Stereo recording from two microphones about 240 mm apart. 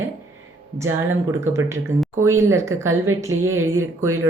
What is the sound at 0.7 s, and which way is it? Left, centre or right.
Speech, centre.